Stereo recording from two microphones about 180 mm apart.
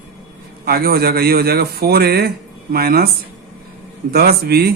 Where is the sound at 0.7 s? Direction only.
60° right (ahead or behind).